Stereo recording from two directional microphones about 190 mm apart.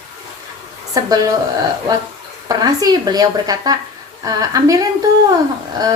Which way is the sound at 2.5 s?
20° right (ahead or behind).